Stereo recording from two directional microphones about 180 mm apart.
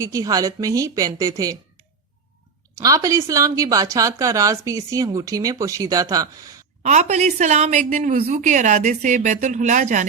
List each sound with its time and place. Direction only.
0.0 s a woman's voice: 20° right (ahead or behind)
2.7 s a woman's voice: 20° right (ahead or behind)
6.8 s a woman's voice: 40° right (ahead or behind)